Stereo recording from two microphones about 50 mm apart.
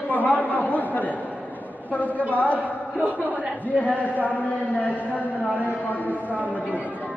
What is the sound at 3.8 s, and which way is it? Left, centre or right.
A man's voice, left.